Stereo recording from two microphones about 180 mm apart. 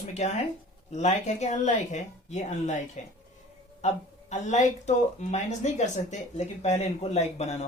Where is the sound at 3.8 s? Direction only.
40° left (ahead or behind).